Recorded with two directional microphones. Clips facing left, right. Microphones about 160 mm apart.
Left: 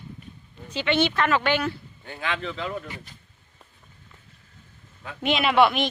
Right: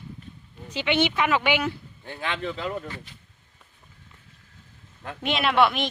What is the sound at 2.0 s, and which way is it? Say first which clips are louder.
Speech: left 1 dB; 35° right (ahead or behind).